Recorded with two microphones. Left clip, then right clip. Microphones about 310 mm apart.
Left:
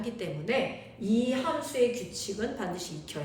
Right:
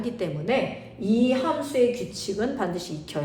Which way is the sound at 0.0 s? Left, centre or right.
Centre.